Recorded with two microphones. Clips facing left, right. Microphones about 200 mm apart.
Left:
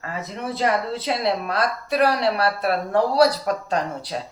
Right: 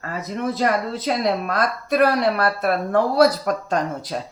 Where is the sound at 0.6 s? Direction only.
45° right (ahead or behind).